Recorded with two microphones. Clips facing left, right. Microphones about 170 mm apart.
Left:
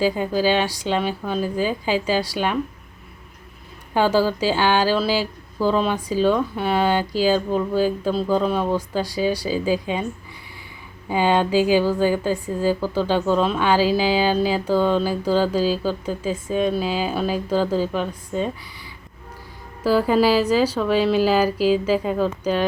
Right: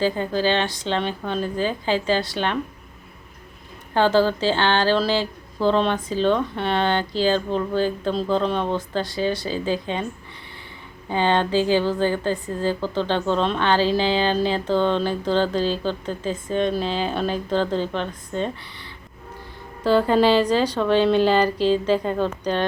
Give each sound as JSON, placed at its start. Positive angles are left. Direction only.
{"t": 0.0, "sound": "speech", "side_deg": 10}
{"t": 3.9, "sound": "speech", "side_deg": 10}
{"t": 11.1, "sound": "a woman's voice", "side_deg": 10}